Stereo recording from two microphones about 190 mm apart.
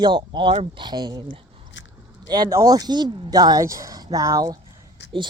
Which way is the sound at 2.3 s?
20° right (ahead or behind).